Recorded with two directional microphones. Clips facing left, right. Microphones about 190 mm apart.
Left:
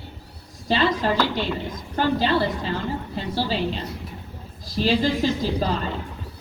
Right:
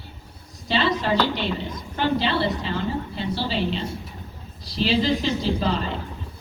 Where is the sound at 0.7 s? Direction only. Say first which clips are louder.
Left 1 dB; 45° left (ahead or behind).